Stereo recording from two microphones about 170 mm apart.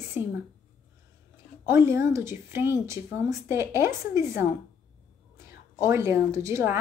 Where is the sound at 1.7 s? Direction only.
15° right (ahead or behind).